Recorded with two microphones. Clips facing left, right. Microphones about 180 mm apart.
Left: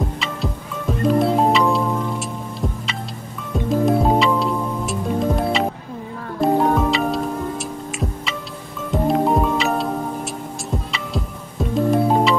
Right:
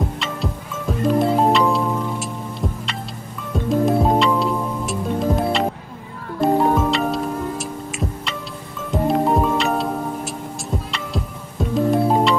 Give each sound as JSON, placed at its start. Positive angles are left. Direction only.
{"t": 0.2, "sound": "music", "side_deg": 0}
{"t": 3.6, "sound": "music", "side_deg": 0}